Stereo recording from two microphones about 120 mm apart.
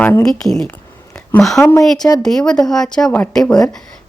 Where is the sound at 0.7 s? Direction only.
15° left (ahead or behind).